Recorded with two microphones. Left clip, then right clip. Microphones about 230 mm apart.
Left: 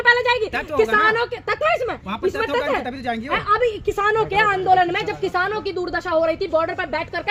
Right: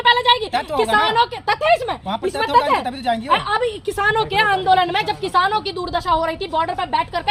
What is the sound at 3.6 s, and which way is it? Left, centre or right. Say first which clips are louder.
A woman's voice: even; centre.